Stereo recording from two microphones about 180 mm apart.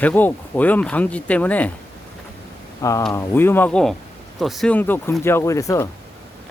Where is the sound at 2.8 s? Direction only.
15° left (ahead or behind).